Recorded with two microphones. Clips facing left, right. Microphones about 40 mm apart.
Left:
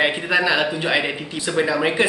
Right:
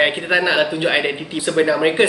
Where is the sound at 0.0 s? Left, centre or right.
Centre.